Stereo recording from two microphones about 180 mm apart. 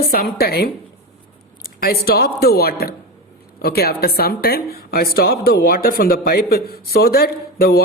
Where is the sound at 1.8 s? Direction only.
55° left (ahead or behind).